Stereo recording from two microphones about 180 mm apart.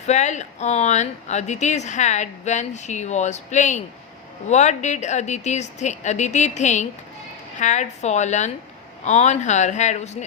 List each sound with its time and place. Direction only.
0.1 s speech: 40° left (ahead or behind)